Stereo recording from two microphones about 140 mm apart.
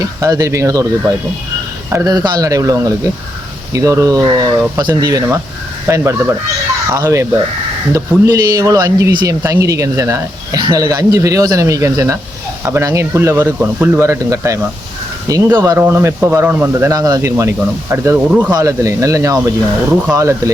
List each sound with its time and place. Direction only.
0.0 s speech: 25° right (ahead or behind)
8.3 s speech: 25° right (ahead or behind); by 18.5 s 10° right (ahead or behind)
18.5 s speech: 25° right (ahead or behind)